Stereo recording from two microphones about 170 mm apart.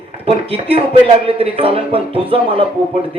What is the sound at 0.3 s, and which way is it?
Speech, 35° right (ahead or behind).